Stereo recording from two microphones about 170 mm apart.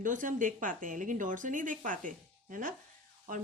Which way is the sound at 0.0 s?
50° right (ahead or behind).